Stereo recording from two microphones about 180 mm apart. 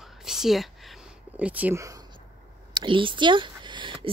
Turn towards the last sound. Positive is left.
turn(degrees=-25)  # may be behind; listen again after turning